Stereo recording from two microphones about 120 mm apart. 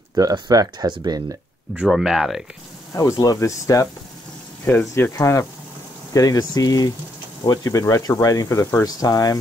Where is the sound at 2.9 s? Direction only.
30° left (ahead or behind).